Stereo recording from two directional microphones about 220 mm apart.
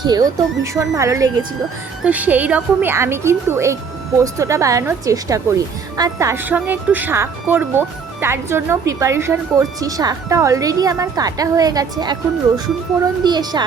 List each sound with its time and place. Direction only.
0.0 s a woman's voice: 15° right (ahead or behind)
13.2 s a woman's voice: 20° right (ahead or behind)